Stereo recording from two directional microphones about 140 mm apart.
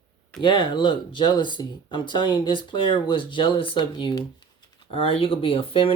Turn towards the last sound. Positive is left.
turn(degrees=40)  # may be behind; listen again after turning